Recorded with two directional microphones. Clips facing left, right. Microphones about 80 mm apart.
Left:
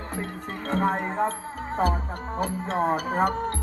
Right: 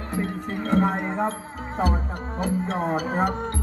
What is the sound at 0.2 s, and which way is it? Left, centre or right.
Speech, right.